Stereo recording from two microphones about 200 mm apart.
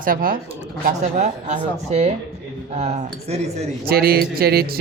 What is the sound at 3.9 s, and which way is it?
Speech, 50° right (ahead or behind).